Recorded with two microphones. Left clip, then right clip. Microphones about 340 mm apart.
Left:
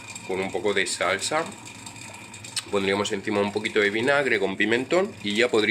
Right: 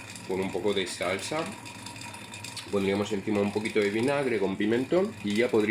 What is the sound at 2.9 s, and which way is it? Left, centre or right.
Speech, left.